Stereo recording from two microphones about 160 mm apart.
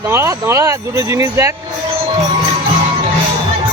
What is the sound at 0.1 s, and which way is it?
Speech, 15° right (ahead or behind).